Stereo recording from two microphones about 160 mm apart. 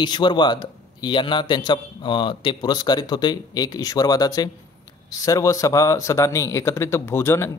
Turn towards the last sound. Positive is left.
turn(degrees=15)  # may be behind; listen again after turning